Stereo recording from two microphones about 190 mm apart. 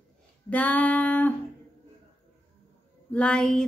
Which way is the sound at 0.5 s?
10° left (ahead or behind).